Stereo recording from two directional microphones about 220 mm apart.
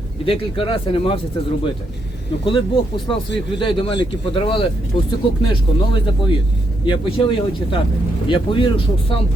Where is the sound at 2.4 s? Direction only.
20° left (ahead or behind).